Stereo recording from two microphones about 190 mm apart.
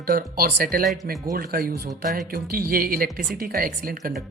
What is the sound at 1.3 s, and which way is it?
Speech, 50° right (ahead or behind).